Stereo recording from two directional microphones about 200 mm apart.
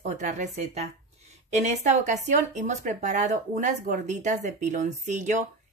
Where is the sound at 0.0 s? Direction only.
35° right (ahead or behind).